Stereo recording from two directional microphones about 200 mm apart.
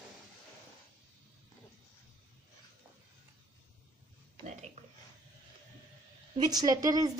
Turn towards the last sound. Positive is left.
turn(degrees=-20)  # may be behind; listen again after turning